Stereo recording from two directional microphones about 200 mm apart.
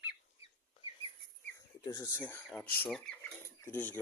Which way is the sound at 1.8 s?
15° left (ahead or behind).